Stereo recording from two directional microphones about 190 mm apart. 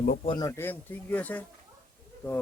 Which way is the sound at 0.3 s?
20° left (ahead or behind).